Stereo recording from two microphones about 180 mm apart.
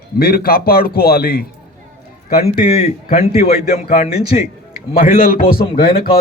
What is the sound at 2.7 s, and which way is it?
A man's voice, 35° left (ahead or behind).